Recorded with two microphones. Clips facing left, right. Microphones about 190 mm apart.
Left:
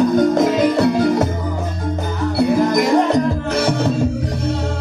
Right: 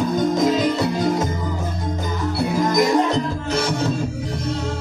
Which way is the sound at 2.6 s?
60° left (ahead or behind).